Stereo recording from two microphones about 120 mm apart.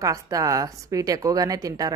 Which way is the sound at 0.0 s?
25° right (ahead or behind).